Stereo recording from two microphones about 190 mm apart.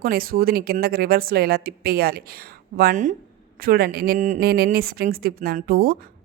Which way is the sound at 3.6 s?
55° right (ahead or behind).